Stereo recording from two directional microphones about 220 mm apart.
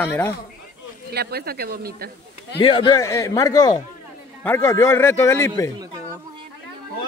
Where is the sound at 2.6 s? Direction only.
25° left (ahead or behind).